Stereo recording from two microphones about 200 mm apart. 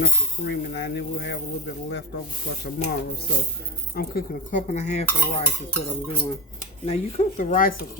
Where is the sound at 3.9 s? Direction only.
50° left (ahead or behind).